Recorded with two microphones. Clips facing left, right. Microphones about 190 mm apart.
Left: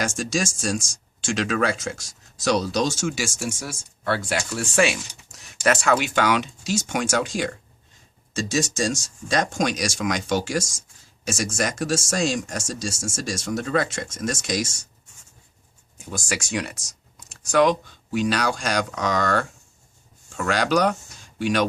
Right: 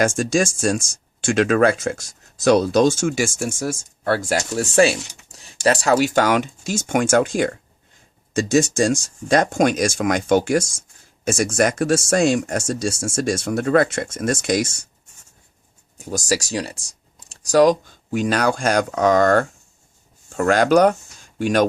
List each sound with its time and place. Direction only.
0.0 s speech: 55° right (ahead or behind)
16.0 s speech: 40° right (ahead or behind)